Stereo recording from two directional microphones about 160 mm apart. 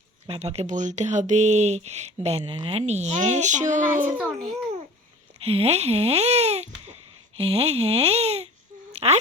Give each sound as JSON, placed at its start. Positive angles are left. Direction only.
{"t": 0.3, "sound": "speech", "side_deg": -40}
{"t": 2.4, "sound": "speech", "side_deg": -25}
{"t": 2.6, "sound": "speech", "side_deg": -40}
{"t": 5.4, "sound": "speech", "side_deg": -40}
{"t": 8.9, "sound": "a sound", "side_deg": -40}